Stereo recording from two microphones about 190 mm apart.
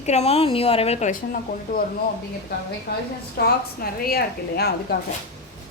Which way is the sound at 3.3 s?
50° left (ahead or behind).